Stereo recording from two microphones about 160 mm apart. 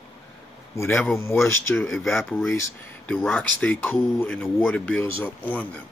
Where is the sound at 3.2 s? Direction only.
5° left (ahead or behind).